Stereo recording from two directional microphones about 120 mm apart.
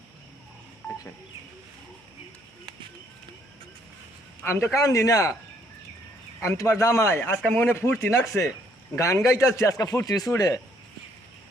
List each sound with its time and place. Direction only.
4.4 s a man's voice: 20° left (ahead or behind)
6.4 s a man's voice: 25° left (ahead or behind)